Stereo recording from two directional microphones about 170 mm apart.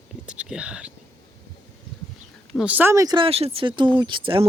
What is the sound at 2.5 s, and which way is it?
Speech, 5° right (ahead or behind).